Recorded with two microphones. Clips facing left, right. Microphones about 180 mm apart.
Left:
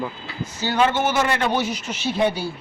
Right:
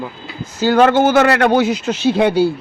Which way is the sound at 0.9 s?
75° right (ahead or behind).